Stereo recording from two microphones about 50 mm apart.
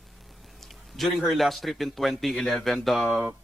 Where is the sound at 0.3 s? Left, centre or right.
Centre.